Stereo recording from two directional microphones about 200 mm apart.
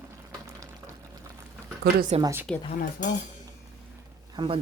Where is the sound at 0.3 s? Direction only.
15° right (ahead or behind).